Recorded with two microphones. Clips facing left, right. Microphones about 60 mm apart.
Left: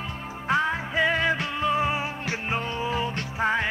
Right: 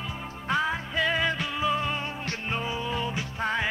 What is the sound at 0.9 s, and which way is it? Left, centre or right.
Music, centre.